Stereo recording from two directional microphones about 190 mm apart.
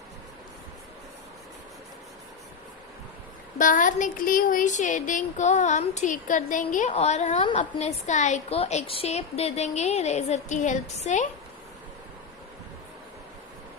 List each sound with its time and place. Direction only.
3.6 s a woman's voice: 45° left (ahead or behind)